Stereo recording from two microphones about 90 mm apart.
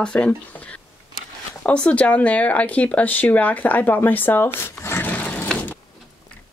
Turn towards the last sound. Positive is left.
turn(degrees=15)  # may be behind; listen again after turning